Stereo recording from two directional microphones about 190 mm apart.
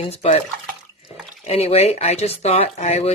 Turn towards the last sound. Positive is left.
turn(degrees=35)  # may be behind; listen again after turning